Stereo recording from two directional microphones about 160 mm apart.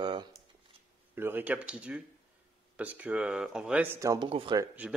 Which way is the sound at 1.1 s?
10° right (ahead or behind).